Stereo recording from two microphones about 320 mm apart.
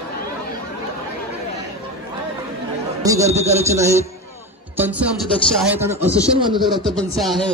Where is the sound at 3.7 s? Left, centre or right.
Centre.